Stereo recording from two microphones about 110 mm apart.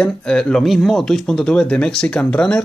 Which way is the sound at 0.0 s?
10° left (ahead or behind).